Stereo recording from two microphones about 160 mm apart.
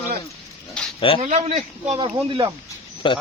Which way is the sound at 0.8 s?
5° left (ahead or behind).